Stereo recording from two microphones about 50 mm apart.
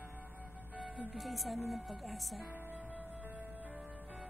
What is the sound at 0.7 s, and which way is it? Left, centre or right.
Music, right.